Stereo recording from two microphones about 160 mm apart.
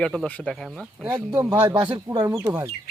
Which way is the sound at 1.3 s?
15° right (ahead or behind).